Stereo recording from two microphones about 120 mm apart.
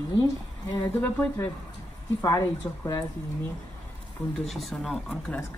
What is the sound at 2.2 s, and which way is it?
Speech, 25° left (ahead or behind).